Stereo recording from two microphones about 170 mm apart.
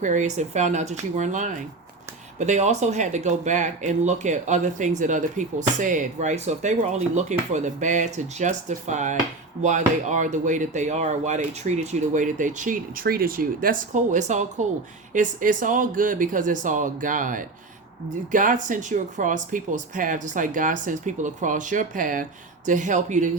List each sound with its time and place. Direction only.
0.0 s speech: 45° right (ahead or behind)